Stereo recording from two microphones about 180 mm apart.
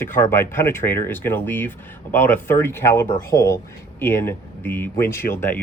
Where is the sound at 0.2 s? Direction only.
15° left (ahead or behind).